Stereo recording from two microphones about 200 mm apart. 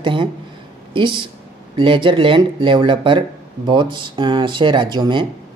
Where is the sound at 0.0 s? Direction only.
25° right (ahead or behind).